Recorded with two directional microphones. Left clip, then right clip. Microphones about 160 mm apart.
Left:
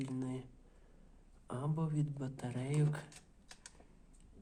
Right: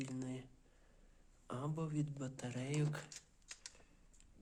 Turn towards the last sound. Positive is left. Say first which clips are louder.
# left 3 dB
turn(degrees=-15)  # may be behind; listen again after turning